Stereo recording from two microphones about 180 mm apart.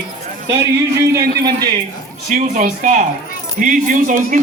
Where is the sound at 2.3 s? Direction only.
45° right (ahead or behind).